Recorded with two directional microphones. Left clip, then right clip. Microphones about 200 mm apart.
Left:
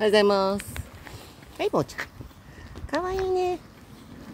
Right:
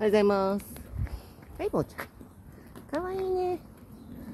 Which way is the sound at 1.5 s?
30° left (ahead or behind).